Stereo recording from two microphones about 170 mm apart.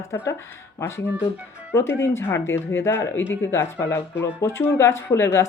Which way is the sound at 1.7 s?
15° left (ahead or behind).